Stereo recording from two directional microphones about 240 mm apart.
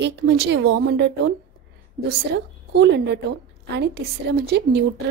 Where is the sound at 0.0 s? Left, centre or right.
Right.